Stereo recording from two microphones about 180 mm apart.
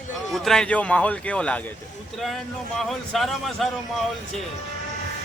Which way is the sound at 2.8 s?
Centre (ahead or behind).